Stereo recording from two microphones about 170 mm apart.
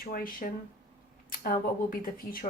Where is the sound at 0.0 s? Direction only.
55° left (ahead or behind).